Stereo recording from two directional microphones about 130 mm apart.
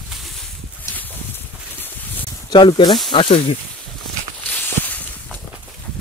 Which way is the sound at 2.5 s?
35° left (ahead or behind).